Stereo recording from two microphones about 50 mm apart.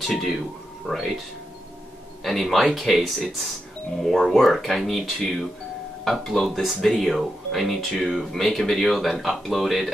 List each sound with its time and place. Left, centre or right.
0.0 s speech: centre
2.2 s speech: centre